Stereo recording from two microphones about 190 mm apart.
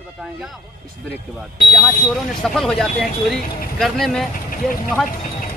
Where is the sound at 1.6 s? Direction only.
Centre (ahead or behind).